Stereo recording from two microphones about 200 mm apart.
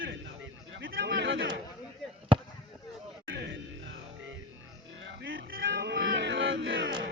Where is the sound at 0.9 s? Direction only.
50° right (ahead or behind).